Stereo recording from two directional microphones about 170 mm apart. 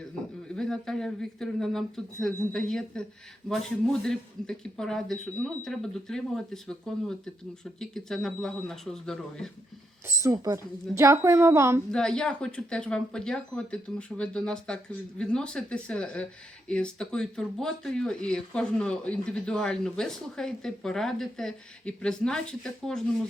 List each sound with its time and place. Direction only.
0.0 s speech: 5° left (ahead or behind)
10.1 s a woman's voice: 15° right (ahead or behind)
11.9 s speech: 5° left (ahead or behind)